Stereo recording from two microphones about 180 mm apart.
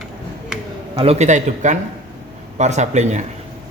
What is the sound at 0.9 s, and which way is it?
Speech, 35° right (ahead or behind).